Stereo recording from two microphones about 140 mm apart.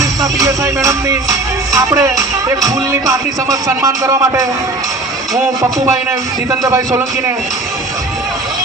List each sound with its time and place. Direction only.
0.0 s music: 25° right (ahead or behind)
6.7 s music: 20° right (ahead or behind)